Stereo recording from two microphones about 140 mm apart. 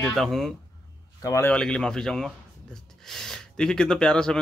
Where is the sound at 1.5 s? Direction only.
5° left (ahead or behind).